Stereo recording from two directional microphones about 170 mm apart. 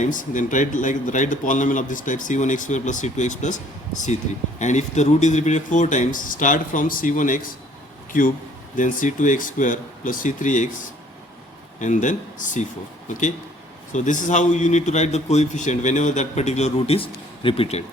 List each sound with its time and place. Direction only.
0.0 s speech: 50° left (ahead or behind)
11.8 s speech: 45° left (ahead or behind)